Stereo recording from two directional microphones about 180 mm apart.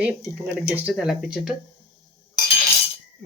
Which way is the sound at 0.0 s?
10° right (ahead or behind).